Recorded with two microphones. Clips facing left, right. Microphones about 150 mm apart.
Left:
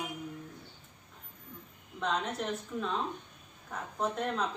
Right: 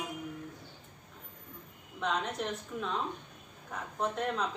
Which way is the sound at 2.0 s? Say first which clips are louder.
Even; centre (ahead or behind).